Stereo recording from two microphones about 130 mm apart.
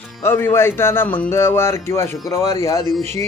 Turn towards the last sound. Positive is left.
turn(degrees=20)  # may be behind; listen again after turning